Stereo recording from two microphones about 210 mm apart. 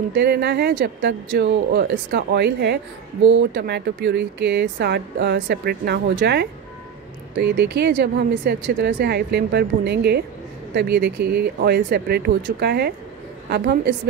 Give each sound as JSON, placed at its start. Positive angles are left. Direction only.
{"t": 0.1, "sound": "speech", "side_deg": -50}